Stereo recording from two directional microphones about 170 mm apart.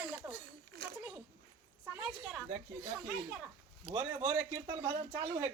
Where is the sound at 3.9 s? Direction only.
15° right (ahead or behind).